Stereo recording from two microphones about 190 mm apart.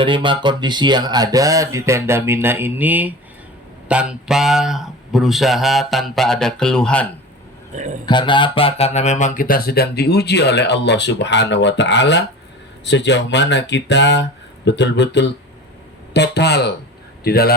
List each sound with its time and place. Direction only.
0.0 s speech: 25° right (ahead or behind); by 7.1 s 5° left (ahead or behind)
8.0 s speech: 25° left (ahead or behind); by 17.5 s 55° left (ahead or behind)